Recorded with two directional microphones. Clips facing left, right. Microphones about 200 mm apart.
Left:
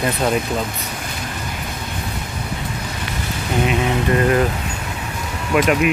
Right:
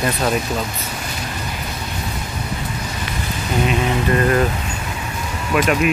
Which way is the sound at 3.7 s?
10° left (ahead or behind).